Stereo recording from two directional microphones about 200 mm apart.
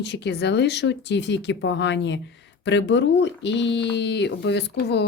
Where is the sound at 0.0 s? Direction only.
55° left (ahead or behind).